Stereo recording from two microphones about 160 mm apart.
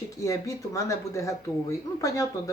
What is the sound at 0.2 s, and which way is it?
Speech, 20° left (ahead or behind).